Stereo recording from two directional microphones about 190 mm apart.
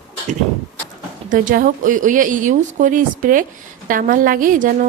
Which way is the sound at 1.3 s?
45° right (ahead or behind).